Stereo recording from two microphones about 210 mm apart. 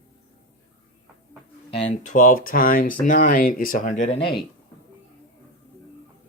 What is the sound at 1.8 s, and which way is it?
Speech, 40° left (ahead or behind).